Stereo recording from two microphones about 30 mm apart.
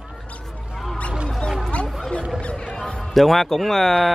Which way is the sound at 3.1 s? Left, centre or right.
Centre.